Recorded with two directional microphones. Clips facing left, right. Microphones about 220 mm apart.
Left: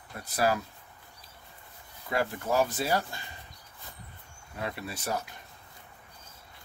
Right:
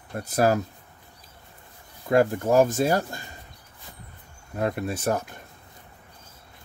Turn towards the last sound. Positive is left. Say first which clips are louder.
# right 8 dB
turn(degrees=-50)  # may be behind; listen again after turning